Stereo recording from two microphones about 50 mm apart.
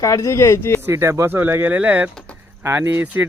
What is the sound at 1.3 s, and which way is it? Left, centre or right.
Speech, right.